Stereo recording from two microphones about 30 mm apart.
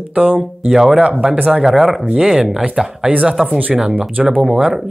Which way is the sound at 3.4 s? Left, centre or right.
Right.